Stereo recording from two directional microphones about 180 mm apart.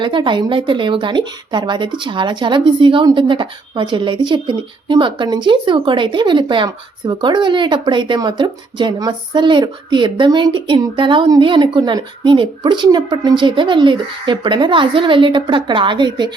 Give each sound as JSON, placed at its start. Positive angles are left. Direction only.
{"t": 0.0, "sound": "speech", "side_deg": -25}